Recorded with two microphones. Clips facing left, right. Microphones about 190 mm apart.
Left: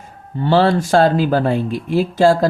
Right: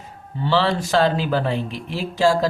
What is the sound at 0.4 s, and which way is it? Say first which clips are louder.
Speech: left 6 dB; 50° left (ahead or behind).